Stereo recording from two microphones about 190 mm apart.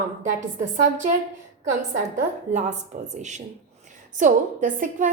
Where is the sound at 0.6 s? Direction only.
45° right (ahead or behind).